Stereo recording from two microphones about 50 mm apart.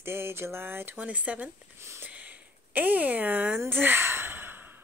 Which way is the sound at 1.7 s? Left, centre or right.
Right.